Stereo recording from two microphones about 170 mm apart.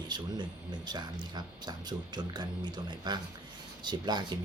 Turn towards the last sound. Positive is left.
turn(degrees=-25)  # may be behind; listen again after turning